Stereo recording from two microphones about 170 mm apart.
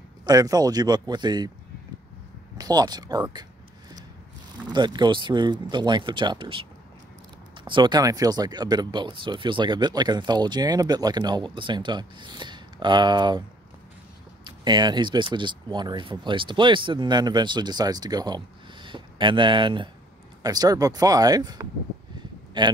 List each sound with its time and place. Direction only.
0.2 s speech: 20° right (ahead or behind)
2.5 s speech: 20° right (ahead or behind)
4.6 s speech: 25° right (ahead or behind)
14.4 s speech: 25° right (ahead or behind)